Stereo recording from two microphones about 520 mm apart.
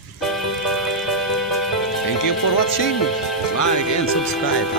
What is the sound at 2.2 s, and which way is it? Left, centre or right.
Speech, left.